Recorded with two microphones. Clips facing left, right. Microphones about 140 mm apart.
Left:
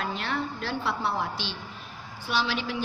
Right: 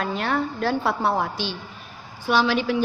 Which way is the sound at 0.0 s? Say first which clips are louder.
Right 6 dB; 50° right (ahead or behind).